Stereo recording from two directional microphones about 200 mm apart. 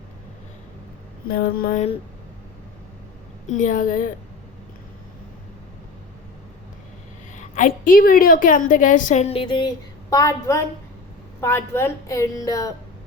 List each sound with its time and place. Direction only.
1.3 s mantra: 50° left (ahead or behind)
3.4 s a woman's voice: 40° left (ahead or behind)
7.3 s a woman's voice: 40° left (ahead or behind); by 12.7 s 15° left (ahead or behind)